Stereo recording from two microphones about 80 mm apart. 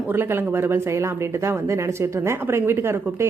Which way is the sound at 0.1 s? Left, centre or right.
Right.